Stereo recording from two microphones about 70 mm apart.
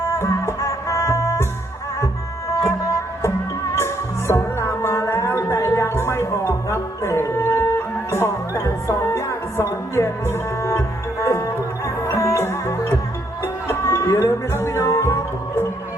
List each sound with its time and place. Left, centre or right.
0.1 s music: left
3.8 s music: left